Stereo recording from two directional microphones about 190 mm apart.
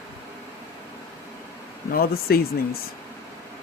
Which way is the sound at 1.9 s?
50° left (ahead or behind).